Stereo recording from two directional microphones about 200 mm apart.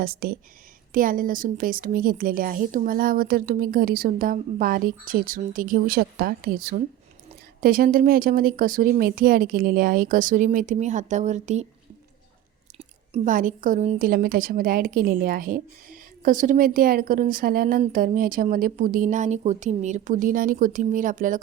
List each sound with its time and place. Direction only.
0.0 s a woman's voice: 45° right (ahead or behind)
12.7 s a woman's voice: 35° right (ahead or behind)